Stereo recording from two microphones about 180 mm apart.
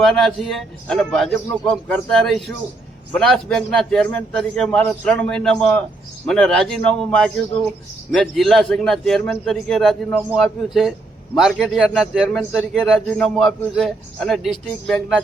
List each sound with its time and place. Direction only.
0.0 s a man's voice: 5° left (ahead or behind)